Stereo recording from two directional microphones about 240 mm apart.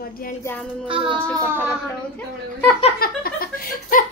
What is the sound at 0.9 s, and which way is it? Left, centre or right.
Child singing, right.